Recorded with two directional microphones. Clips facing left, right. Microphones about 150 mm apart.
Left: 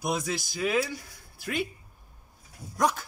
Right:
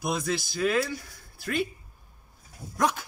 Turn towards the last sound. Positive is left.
turn(degrees=-5)  # may be behind; listen again after turning